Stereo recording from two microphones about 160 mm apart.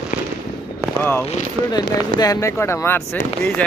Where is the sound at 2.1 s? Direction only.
20° left (ahead or behind).